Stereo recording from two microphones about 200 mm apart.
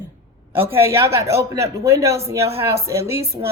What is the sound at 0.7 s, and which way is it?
Speech, 15° right (ahead or behind).